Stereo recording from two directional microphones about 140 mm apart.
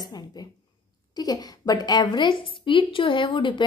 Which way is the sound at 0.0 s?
30° left (ahead or behind).